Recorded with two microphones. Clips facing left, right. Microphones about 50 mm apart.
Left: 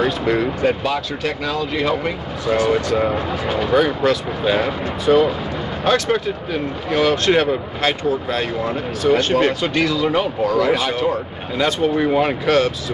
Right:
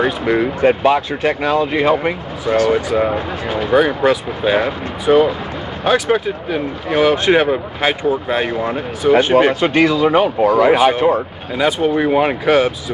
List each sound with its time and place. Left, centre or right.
0.0 s speech: centre
0.6 s speech: right
2.7 s speech: centre